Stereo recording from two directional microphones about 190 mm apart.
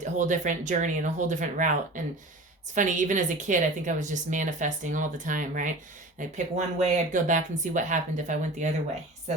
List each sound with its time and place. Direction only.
0.0 s a woman's voice: 40° right (ahead or behind)